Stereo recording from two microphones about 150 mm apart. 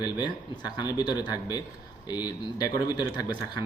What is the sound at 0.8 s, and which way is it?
A man's voice, 30° left (ahead or behind).